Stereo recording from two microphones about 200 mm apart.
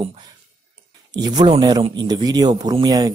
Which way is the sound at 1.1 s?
20° right (ahead or behind).